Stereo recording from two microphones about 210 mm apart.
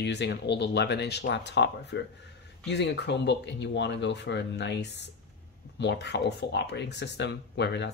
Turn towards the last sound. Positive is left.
turn(degrees=55)  # may be behind; listen again after turning